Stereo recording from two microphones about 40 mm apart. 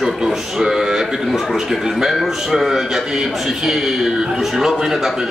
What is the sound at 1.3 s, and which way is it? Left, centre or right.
A man's voice, centre.